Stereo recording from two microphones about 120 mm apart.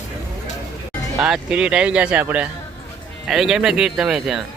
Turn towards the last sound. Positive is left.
turn(degrees=-5)  # may be behind; listen again after turning